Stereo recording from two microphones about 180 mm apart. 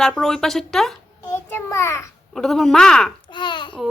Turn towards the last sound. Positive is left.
turn(degrees=25)  # may be behind; listen again after turning